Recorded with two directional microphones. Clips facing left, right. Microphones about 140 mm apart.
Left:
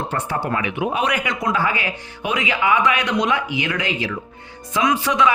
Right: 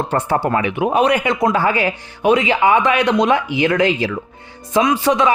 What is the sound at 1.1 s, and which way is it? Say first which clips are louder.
A man's voice: right 6 dB; 30° right (ahead or behind).